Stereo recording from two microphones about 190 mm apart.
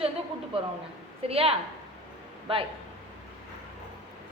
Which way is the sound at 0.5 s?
30° right (ahead or behind).